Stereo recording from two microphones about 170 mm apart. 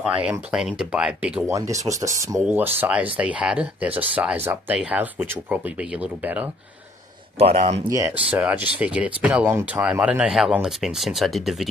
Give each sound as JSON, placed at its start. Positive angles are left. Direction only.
{"t": 0.2, "sound": "speech", "side_deg": -5}
{"t": 1.5, "sound": "speech", "side_deg": -20}
{"t": 7.3, "sound": "speech", "side_deg": -35}
{"t": 7.9, "sound": "speech", "side_deg": -15}